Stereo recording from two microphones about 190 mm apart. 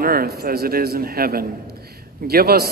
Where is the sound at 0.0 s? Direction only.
50° right (ahead or behind).